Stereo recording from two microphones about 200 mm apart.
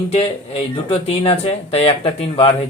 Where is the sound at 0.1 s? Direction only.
30° left (ahead or behind).